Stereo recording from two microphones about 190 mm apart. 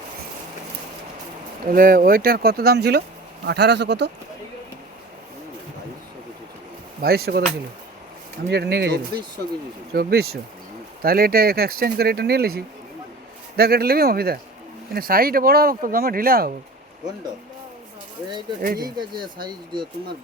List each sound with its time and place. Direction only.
1.6 s speech: 50° right (ahead or behind); by 4.1 s 65° right (ahead or behind)
7.0 s speech: 55° right (ahead or behind)
8.4 s speech: 60° right (ahead or behind)
18.8 s speech: 20° right (ahead or behind)